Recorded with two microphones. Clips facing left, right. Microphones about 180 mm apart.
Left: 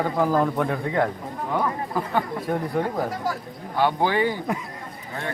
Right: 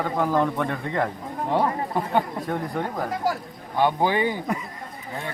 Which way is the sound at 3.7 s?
20° right (ahead or behind).